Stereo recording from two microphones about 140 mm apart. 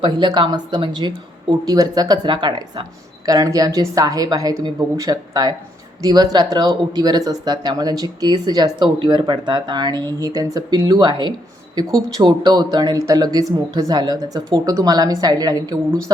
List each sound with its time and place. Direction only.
0.0 s speech: 35° right (ahead or behind)